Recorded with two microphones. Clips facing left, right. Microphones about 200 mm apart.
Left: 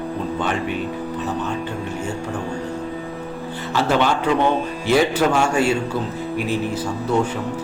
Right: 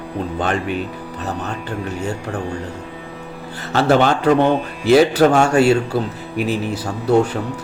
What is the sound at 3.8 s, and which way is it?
A man's voice, 45° right (ahead or behind).